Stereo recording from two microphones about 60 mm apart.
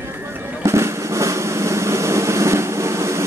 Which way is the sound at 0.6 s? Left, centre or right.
Right.